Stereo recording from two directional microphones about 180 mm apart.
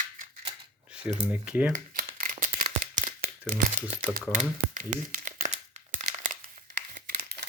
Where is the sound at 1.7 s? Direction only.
50° right (ahead or behind).